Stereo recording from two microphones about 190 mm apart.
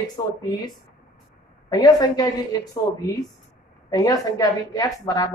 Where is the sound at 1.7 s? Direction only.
20° left (ahead or behind).